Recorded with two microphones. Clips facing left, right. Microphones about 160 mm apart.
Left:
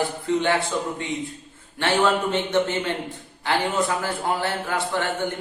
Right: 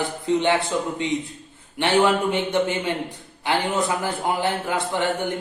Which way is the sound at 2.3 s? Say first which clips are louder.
Even; 15° right (ahead or behind).